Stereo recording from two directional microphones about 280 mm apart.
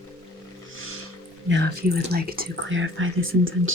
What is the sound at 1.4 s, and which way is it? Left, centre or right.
Speech, right.